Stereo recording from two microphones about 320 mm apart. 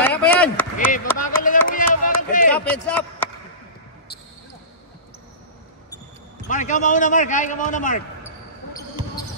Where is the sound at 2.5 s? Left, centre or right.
Centre.